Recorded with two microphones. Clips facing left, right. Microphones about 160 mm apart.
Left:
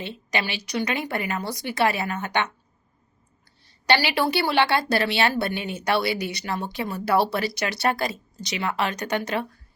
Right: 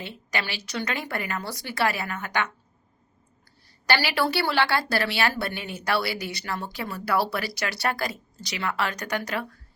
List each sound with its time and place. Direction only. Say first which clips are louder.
0.0 s a woman's voice: left 3 dB; 20° left (ahead or behind)
3.8 s a woman's voice: left 3 dB; 20° left (ahead or behind)